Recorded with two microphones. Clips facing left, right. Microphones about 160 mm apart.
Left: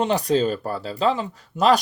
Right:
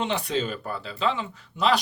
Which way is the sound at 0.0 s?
40° left (ahead or behind).